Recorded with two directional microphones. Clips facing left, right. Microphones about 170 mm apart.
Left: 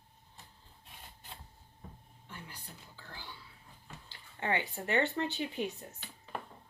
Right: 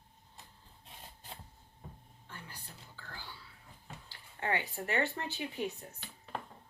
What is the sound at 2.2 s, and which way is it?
Whispering, 15° left (ahead or behind).